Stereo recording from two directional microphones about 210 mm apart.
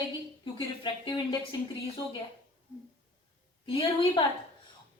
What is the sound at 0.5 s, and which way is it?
Speech, 20° left (ahead or behind).